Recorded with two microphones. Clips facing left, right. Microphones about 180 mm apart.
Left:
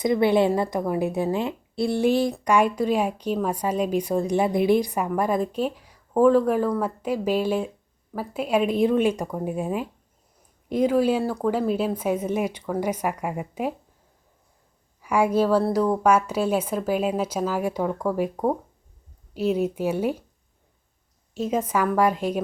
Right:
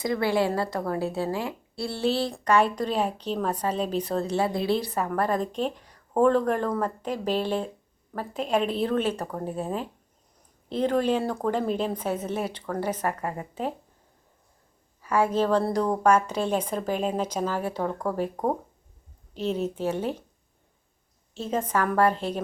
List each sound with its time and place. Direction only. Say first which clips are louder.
0.0 s a woman's voice: left 5 dB; 20° left (ahead or behind)
15.0 s a woman's voice: left 3 dB; 10° left (ahead or behind)
19.3 s a woman's voice: left 5 dB; 10° left (ahead or behind)
21.3 s a woman's voice: left 3 dB; 10° left (ahead or behind)